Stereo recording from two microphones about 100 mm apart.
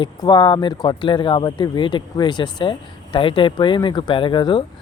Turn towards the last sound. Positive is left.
turn(degrees=55)  # may be behind; listen again after turning